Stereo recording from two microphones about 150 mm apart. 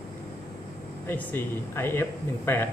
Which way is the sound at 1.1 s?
15° left (ahead or behind).